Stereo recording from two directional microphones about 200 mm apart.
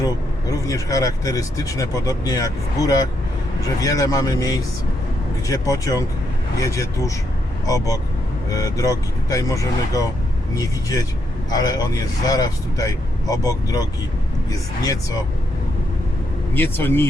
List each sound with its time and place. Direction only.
0.0 s speech: 15° left (ahead or behind)
8.4 s a man's voice: 15° left (ahead or behind)
16.6 s speech: 10° left (ahead or behind)